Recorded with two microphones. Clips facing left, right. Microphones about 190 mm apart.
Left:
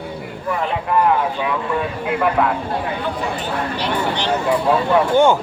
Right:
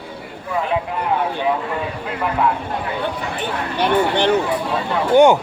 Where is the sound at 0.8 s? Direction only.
65° left (ahead or behind).